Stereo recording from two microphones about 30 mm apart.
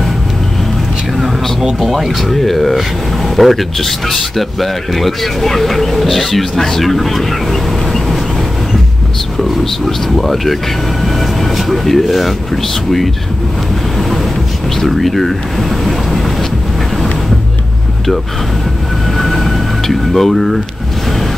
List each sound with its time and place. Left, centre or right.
1.8 s speech: centre
9.4 s speech: centre
14.8 s speech: centre
15.8 s vehicle: centre
19.1 s a sound: centre